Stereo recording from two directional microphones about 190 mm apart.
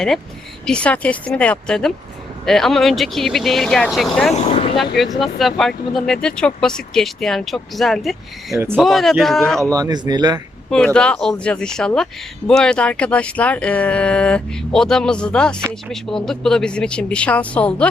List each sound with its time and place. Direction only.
0.6 s speech: 5° left (ahead or behind)
4.4 s vehicle: 30° left (ahead or behind)
5.2 s speech: centre (ahead or behind)
8.5 s speech: 10° right (ahead or behind)
8.8 s speech: centre (ahead or behind)
9.7 s speech: 20° right (ahead or behind)
10.7 s speech: 5° left (ahead or behind)